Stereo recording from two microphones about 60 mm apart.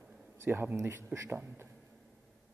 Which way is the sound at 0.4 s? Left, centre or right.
Right.